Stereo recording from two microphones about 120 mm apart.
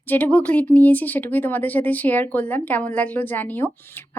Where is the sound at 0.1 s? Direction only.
10° left (ahead or behind).